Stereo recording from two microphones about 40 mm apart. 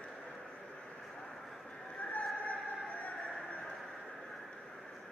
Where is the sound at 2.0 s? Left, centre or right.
Left.